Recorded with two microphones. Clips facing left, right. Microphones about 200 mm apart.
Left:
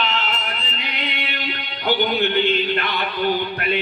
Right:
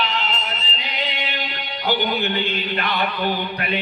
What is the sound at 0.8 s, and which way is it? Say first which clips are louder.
Music: even; 60° left (ahead or behind).